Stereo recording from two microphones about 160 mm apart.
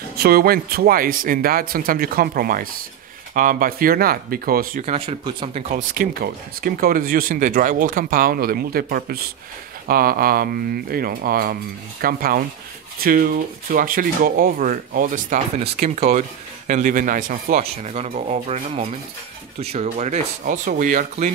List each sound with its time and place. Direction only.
0.2 s speech: 70° right (ahead or behind)
4.8 s speech: 40° right (ahead or behind)
5.8 s speech: 65° right (ahead or behind)
15.6 s speech: 45° right (ahead or behind)